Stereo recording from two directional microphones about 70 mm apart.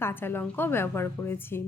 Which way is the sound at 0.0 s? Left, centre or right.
Left.